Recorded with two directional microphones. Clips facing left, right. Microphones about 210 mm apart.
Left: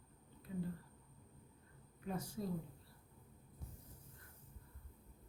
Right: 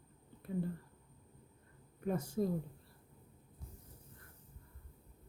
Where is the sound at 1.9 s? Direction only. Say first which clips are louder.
Right 7 dB; 50° right (ahead or behind).